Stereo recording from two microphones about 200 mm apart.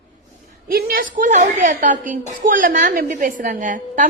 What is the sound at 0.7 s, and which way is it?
A woman's voice, 45° right (ahead or behind).